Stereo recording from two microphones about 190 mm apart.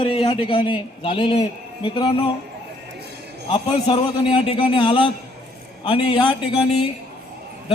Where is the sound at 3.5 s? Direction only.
30° left (ahead or behind).